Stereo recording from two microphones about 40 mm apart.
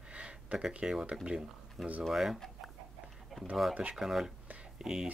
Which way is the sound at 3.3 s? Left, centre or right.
Centre.